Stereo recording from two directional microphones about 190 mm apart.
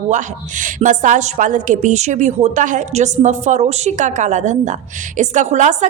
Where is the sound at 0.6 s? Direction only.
40° right (ahead or behind).